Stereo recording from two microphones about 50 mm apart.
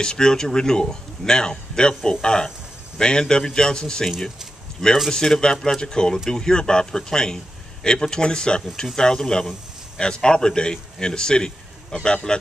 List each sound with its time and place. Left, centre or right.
0.0 s a man's voice: centre